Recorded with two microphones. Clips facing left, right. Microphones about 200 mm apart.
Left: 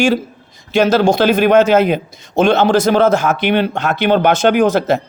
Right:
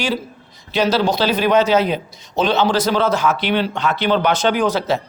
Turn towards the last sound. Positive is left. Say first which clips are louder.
# left 5 dB
turn(degrees=50)  # may be behind; listen again after turning